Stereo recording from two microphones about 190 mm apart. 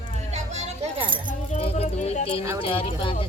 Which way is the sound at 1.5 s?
35° left (ahead or behind).